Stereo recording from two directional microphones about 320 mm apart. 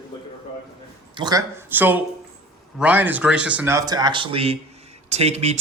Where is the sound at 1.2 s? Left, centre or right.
Centre.